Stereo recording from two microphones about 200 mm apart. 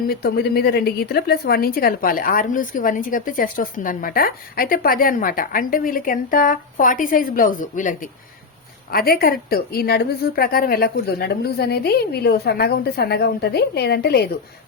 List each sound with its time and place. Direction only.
0.1 s a woman's voice: 50° left (ahead or behind)